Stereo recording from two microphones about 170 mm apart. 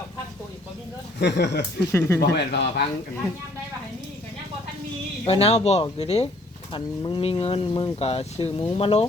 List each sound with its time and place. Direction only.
1.2 s speech: 90° left
1.9 s speech: 15° left (ahead or behind)
2.2 s speech: 75° left (ahead or behind)
5.2 s speech: 35° left (ahead or behind)